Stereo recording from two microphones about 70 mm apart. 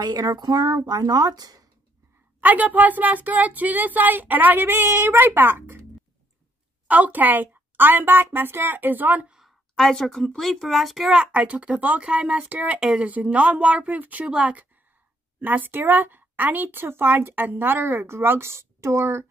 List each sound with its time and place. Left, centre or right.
0.0 s speech: right
2.4 s a woman's voice: right
6.9 s a woman's voice: right
9.3 s speech: centre
11.1 s a woman's voice: centre; by 19.2 s right